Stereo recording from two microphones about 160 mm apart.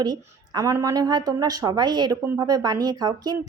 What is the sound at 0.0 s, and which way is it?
Speech, 25° right (ahead or behind).